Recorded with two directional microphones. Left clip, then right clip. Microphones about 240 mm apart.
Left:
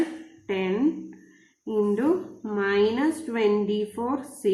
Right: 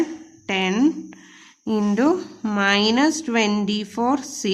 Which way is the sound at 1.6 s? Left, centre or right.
Right.